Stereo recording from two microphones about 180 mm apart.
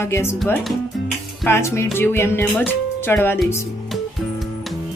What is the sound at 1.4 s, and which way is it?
Speech, 15° left (ahead or behind).